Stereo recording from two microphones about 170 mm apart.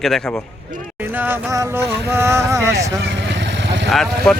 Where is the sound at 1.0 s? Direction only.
10° right (ahead or behind).